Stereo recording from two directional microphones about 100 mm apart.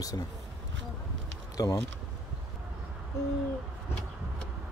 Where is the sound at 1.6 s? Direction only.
35° left (ahead or behind).